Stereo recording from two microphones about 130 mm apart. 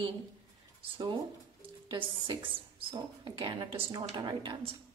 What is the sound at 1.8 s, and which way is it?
Speech, 40° right (ahead or behind).